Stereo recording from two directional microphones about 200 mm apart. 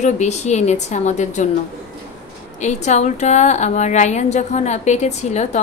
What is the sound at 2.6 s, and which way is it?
A woman's voice, 35° left (ahead or behind).